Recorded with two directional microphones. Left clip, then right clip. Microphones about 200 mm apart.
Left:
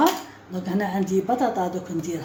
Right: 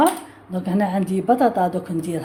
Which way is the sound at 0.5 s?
40° right (ahead or behind).